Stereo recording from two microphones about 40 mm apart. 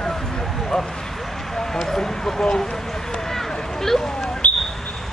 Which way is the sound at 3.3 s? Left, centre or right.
Centre.